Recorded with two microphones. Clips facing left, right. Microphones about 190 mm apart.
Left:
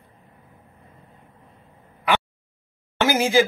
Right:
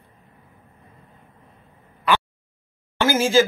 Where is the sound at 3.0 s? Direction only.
15° left (ahead or behind).